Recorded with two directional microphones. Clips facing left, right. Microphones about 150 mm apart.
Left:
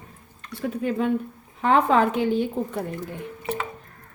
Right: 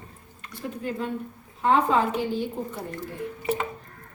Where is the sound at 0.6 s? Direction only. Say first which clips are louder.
Left 6 dB; 65° left (ahead or behind).